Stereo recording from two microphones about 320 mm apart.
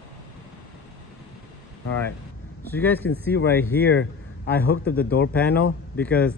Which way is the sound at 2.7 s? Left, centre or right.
Centre.